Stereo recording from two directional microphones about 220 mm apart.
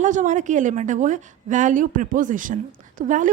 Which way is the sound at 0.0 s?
35° right (ahead or behind).